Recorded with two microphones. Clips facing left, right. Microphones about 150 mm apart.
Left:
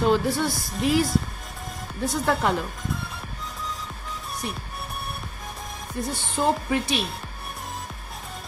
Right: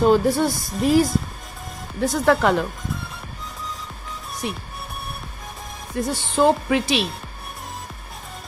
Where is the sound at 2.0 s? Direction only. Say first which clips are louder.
Right 6 dB; 90° right.